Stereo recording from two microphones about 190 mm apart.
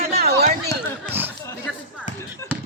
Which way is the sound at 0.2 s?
55° right (ahead or behind).